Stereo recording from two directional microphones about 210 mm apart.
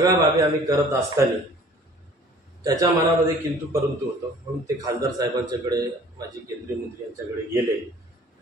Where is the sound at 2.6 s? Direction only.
15° right (ahead or behind).